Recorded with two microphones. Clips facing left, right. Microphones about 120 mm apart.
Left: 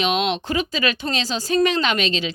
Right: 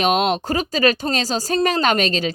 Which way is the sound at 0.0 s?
45° right (ahead or behind).